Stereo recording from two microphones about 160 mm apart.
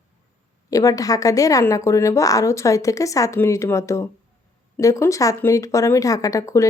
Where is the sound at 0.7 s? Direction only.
20° left (ahead or behind).